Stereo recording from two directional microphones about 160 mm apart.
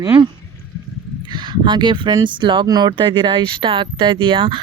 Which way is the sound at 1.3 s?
30° right (ahead or behind).